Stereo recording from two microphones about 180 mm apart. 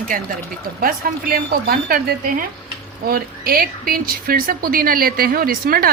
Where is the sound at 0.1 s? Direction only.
50° right (ahead or behind).